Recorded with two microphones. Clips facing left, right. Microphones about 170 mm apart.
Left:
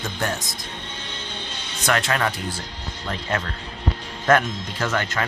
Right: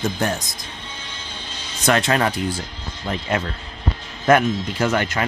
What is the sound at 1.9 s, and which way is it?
Speech, 25° right (ahead or behind).